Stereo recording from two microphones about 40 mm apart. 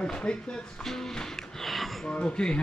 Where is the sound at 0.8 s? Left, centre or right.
Centre.